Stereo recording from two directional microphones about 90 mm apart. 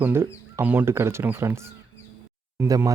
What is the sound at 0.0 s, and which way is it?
Speech, 25° right (ahead or behind).